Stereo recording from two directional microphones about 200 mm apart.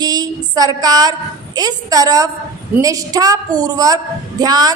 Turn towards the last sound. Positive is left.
turn(degrees=-20)  # may be behind; listen again after turning